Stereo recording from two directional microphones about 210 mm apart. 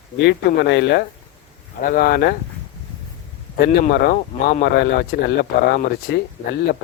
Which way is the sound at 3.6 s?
50° left (ahead or behind).